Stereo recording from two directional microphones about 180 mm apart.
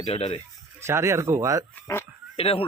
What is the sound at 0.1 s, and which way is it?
Speech, 35° left (ahead or behind).